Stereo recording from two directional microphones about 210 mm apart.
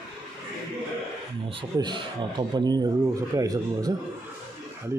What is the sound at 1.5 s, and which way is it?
A man's voice, 20° right (ahead or behind).